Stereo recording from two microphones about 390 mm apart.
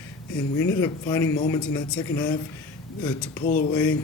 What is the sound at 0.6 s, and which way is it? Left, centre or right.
Speech, centre.